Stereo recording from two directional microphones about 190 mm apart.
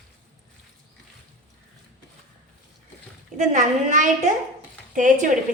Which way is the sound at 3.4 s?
40° right (ahead or behind).